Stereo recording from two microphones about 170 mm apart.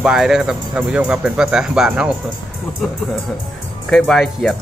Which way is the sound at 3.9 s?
Centre (ahead or behind).